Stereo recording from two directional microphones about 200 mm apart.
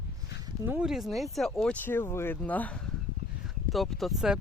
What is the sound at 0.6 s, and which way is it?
Speech, 5° right (ahead or behind).